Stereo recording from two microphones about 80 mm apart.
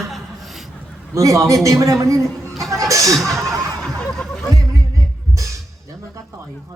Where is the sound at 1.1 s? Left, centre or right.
Right.